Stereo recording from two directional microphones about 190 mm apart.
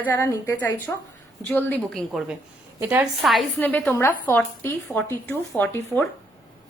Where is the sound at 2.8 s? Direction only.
10° right (ahead or behind).